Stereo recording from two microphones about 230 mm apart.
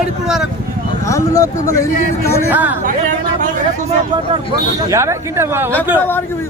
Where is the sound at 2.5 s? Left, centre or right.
Centre.